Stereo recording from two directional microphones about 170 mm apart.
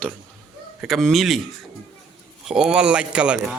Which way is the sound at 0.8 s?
Centre (ahead or behind).